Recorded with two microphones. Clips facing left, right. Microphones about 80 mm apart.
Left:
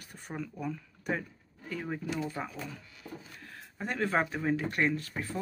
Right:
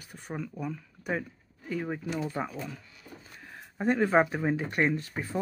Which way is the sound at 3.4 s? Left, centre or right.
Centre.